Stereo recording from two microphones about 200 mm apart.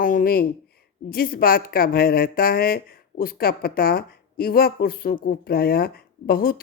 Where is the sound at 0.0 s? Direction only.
45° left (ahead or behind).